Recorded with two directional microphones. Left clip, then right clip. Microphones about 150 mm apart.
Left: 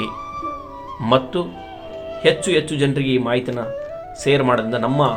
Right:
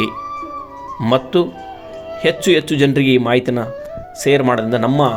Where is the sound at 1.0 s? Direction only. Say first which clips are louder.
Right 3 dB; 45° right (ahead or behind).